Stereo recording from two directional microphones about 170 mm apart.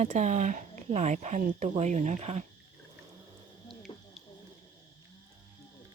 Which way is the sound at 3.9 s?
30° left (ahead or behind).